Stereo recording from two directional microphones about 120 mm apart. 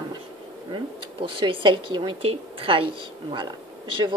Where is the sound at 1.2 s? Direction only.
45° right (ahead or behind).